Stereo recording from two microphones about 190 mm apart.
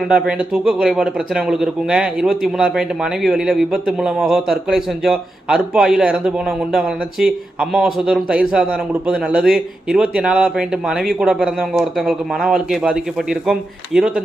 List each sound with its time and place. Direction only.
0.1 s speech: 5° right (ahead or behind)